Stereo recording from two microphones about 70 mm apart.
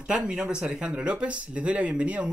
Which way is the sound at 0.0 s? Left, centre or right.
Centre.